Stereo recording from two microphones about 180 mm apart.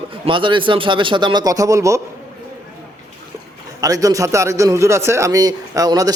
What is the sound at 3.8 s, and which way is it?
A man's voice, 20° right (ahead or behind).